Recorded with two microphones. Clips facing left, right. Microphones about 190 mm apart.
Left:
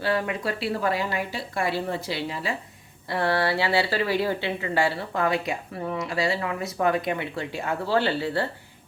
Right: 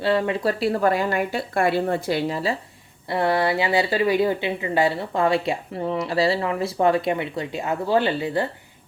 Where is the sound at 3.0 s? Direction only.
20° right (ahead or behind).